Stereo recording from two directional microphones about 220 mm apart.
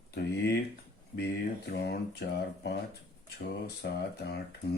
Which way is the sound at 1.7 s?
50° left (ahead or behind).